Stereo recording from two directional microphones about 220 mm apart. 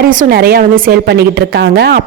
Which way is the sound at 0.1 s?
40° right (ahead or behind).